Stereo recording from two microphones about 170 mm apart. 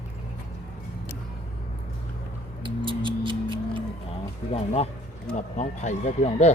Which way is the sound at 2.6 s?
30° right (ahead or behind).